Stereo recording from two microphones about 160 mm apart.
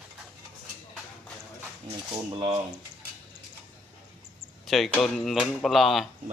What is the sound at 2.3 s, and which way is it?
Speech, 30° right (ahead or behind).